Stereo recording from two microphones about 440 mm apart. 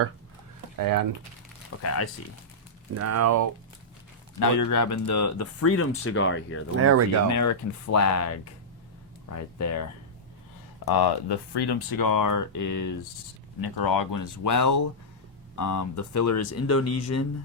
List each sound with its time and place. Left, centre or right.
0.8 s speech: right
1.8 s speech: left
2.9 s speech: right
4.4 s speech: left
6.7 s speech: right
7.3 s speech: left
10.8 s speech: left
13.6 s speech: left